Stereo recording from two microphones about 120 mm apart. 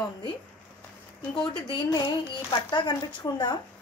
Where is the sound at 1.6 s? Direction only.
40° left (ahead or behind).